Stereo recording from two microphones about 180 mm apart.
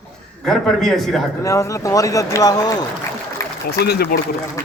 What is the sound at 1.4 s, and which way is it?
Speech, 15° left (ahead or behind).